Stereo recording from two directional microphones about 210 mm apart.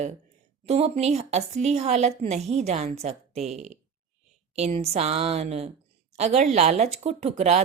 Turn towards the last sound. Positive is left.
turn(degrees=-30)  # may be behind; listen again after turning